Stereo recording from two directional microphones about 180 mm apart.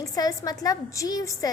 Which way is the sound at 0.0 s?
20° left (ahead or behind).